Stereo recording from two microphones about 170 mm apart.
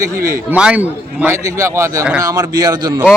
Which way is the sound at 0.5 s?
5° right (ahead or behind).